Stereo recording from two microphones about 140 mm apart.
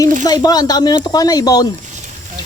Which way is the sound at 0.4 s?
30° left (ahead or behind).